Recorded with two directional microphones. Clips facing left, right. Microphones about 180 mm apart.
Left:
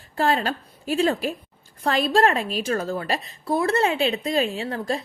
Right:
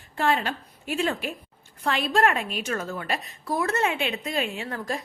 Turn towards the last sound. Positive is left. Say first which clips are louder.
# left 4 dB
turn(degrees=30)  # may be behind; listen again after turning